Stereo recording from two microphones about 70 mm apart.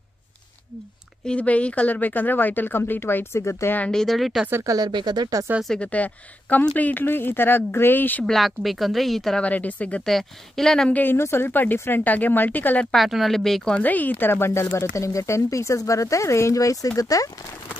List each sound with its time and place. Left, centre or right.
1.2 s a woman's voice: centre; by 3.7 s left
3.9 s speech: centre
4.6 s speech: right
5.8 s a woman's voice: centre
6.9 s speech: left
8.3 s speech: centre
9.4 s a woman's voice: left
10.0 s speech: centre
10.9 s a woman's voice: left
11.1 s a woman's voice: left
12.9 s speech: centre
13.7 s speech: left